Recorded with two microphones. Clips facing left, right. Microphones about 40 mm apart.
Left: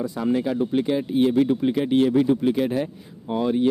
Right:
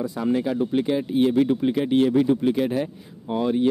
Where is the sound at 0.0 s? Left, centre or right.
Centre.